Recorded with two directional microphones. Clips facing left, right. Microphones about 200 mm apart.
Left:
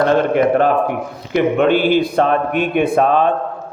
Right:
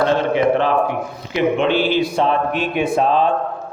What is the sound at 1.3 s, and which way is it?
Speech, 55° left (ahead or behind).